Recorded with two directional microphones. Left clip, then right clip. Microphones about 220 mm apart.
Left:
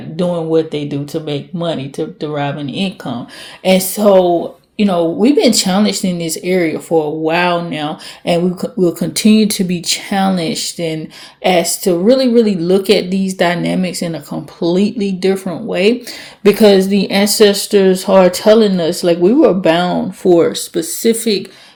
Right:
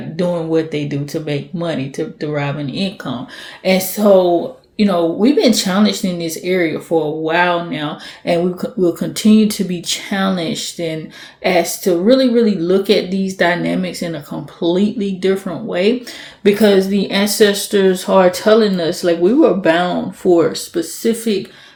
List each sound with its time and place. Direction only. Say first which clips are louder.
0.2 s speech: left 2 dB; 20° left (ahead or behind)